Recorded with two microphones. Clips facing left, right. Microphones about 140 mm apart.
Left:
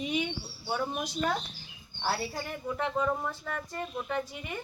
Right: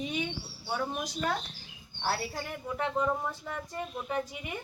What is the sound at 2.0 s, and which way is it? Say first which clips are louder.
Speech: left 1 dB; centre (ahead or behind).